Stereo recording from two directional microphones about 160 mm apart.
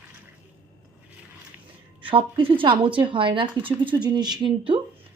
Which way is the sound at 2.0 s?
35° right (ahead or behind).